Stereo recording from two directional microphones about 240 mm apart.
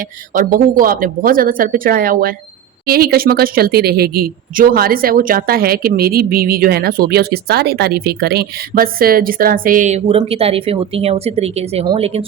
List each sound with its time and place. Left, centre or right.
0.3 s a woman's voice: right